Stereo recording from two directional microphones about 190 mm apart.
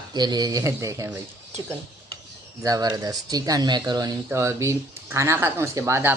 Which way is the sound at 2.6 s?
20° right (ahead or behind).